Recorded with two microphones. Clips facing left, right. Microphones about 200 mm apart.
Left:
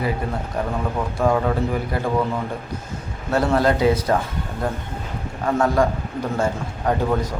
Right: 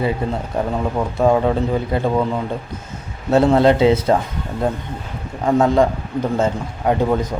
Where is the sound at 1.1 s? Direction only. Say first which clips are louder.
Right 4 dB; 25° right (ahead or behind).